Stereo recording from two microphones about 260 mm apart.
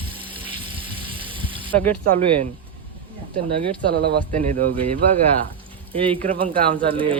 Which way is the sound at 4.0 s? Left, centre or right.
Right.